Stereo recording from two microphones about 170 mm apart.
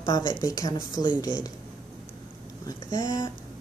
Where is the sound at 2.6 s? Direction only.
20° left (ahead or behind).